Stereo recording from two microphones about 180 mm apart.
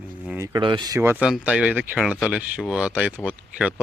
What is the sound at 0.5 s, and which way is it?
Speech, 25° right (ahead or behind).